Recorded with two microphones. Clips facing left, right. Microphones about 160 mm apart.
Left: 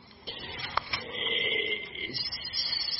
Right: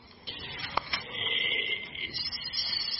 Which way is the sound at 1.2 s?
40° left (ahead or behind).